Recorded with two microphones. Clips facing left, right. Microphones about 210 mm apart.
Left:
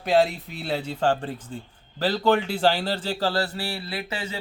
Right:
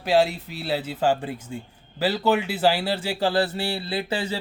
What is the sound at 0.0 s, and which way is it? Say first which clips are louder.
Speech: even; centre (ahead or behind).